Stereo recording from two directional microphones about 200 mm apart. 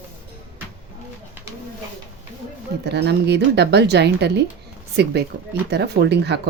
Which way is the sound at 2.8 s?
55° right (ahead or behind).